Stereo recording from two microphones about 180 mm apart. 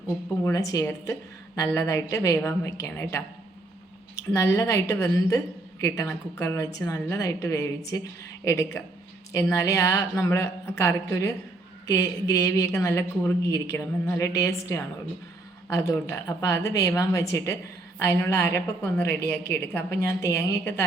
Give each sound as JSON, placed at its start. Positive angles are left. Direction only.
{"t": 0.4, "sound": "speech", "side_deg": 20}
{"t": 4.4, "sound": "speech", "side_deg": 15}